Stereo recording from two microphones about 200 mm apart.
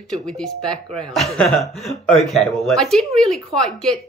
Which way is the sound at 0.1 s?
5° left (ahead or behind).